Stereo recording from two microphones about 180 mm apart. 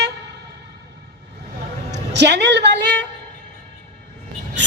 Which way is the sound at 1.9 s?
75° right (ahead or behind).